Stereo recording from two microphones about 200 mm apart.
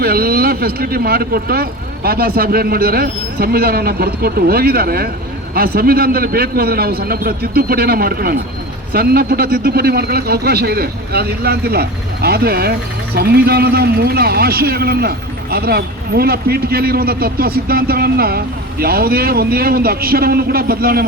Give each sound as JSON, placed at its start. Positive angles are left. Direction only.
{"t": 0.0, "sound": "a man's voice", "side_deg": -50}